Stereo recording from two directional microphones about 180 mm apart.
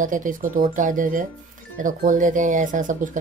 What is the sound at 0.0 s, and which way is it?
Speech, 45° right (ahead or behind).